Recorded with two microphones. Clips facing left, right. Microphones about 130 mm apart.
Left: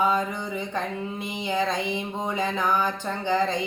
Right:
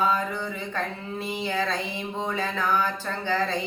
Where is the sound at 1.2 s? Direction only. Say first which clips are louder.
Left 1 dB; 15° left (ahead or behind).